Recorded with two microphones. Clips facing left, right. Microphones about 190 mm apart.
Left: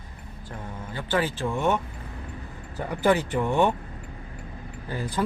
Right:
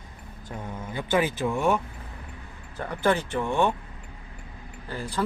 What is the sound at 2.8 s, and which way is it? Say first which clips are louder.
Speech: left 2 dB; 15° left (ahead or behind).